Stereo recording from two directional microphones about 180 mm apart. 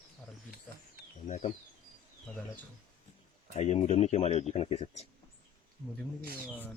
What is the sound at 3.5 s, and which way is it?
Speech, 35° left (ahead or behind).